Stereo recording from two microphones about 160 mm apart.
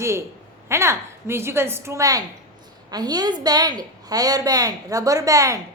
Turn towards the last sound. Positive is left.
turn(degrees=-20)  # may be behind; listen again after turning